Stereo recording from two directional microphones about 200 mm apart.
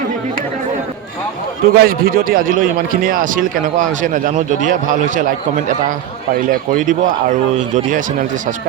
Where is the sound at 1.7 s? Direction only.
50° right (ahead or behind).